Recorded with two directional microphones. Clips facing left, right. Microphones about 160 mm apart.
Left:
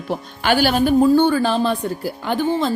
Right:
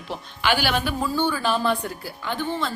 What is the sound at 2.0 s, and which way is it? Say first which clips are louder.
Speech: left 9 dB; 45° left (ahead or behind).